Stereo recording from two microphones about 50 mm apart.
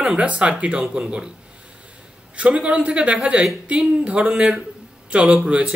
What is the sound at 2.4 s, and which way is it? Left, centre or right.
Speech, right.